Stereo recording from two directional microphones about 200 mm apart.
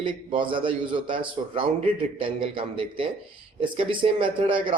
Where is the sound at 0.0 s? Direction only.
25° right (ahead or behind).